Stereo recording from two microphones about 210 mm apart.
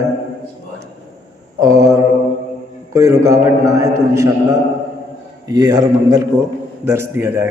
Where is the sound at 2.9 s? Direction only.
15° right (ahead or behind).